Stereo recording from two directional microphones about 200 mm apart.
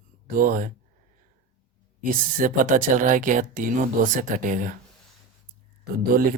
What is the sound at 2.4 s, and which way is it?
Speech, 40° right (ahead or behind).